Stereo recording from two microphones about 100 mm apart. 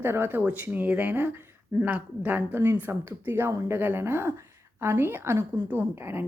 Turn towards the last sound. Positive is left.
turn(degrees=-20)  # may be behind; listen again after turning